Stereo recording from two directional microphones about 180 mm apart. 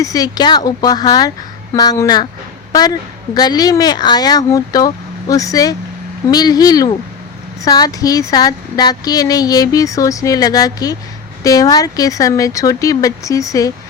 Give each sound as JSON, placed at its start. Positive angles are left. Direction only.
{"t": 0.0, "sound": "speech", "side_deg": 20}
{"t": 3.3, "sound": "speech", "side_deg": 20}